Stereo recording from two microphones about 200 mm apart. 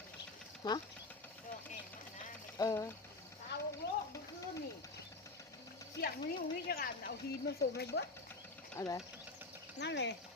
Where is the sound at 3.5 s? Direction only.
55° left (ahead or behind).